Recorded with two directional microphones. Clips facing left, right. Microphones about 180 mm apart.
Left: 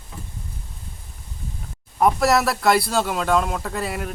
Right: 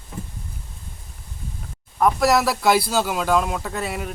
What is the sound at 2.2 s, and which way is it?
Speech, centre (ahead or behind).